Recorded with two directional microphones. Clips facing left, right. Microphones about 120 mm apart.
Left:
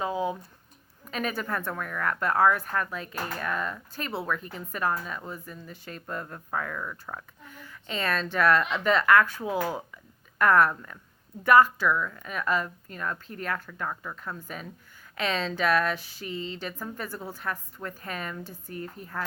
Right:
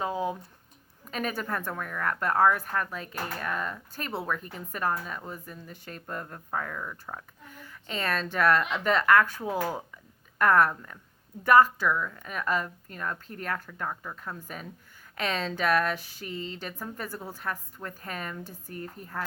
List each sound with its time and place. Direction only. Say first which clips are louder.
0.1 s a sound: left 1 dB; 10° left (ahead or behind)
1.1 s speech: left 1 dB; 40° right (ahead or behind)
6.5 s speech: left 1 dB; 25° right (ahead or behind)
7.5 s speech: left 1 dB; 40° right (ahead or behind)
9.6 s speech: left 1 dB; centre (ahead or behind)
10.4 s speech: left 1 dB; 40° right (ahead or behind)
14.4 s speech: left 1 dB; 40° right (ahead or behind)